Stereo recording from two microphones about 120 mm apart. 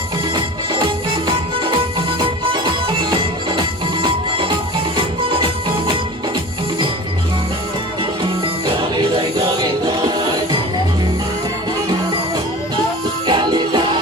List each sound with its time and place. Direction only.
0.7 s music: 45° right (ahead or behind)
4.0 s music: 45° right (ahead or behind)
9.8 s music: 35° right (ahead or behind)
13.2 s music: 40° right (ahead or behind)